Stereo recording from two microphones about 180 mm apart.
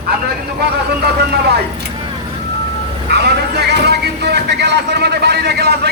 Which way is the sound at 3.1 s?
65° right (ahead or behind).